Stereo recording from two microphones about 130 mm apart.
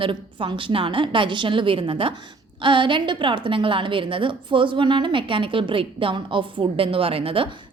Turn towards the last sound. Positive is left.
turn(degrees=-45)  # may be behind; listen again after turning